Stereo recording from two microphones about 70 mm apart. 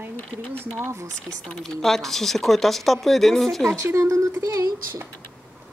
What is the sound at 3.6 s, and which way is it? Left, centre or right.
A woman's voice, right.